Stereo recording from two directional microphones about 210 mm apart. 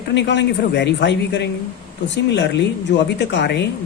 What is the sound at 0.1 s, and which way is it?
Speech, 55° left (ahead or behind).